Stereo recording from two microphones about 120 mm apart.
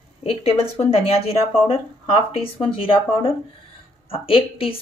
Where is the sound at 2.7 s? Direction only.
50° left (ahead or behind).